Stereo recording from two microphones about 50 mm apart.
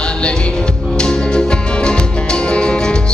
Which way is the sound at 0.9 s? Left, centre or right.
Centre.